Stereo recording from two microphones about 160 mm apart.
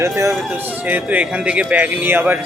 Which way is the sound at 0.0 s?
20° right (ahead or behind).